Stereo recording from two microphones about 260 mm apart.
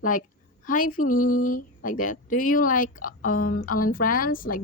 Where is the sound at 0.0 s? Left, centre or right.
Left.